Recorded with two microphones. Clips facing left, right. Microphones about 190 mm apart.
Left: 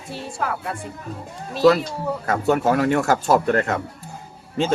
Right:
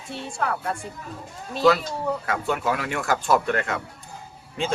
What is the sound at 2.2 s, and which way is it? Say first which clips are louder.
Speech: left 6 dB; 45° left (ahead or behind).